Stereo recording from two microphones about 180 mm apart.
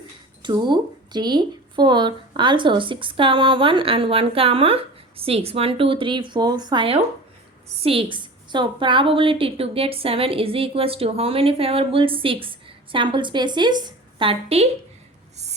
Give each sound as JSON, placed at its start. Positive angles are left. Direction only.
{"t": 0.4, "sound": "a woman's voice", "side_deg": -25}